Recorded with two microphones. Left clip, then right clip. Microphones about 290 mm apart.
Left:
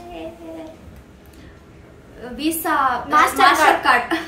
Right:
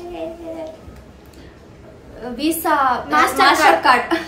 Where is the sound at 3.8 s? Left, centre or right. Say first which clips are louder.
Right 2 dB; centre.